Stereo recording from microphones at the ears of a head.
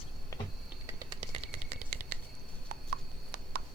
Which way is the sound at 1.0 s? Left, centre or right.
Right.